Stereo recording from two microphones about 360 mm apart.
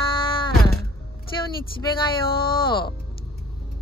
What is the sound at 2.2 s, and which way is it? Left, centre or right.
Speech, centre.